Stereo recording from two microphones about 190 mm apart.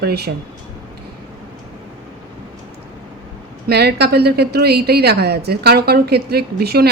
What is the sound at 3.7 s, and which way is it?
A woman's voice, 60° right (ahead or behind).